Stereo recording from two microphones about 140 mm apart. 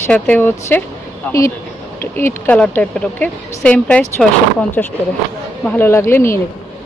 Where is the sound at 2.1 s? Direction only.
15° left (ahead or behind).